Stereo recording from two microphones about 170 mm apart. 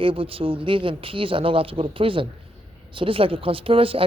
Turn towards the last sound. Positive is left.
turn(degrees=-30)  # may be behind; listen again after turning